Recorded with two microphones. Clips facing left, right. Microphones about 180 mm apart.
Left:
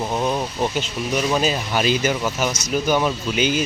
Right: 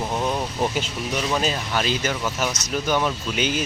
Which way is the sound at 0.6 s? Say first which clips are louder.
Left 1 dB; 5° right (ahead or behind).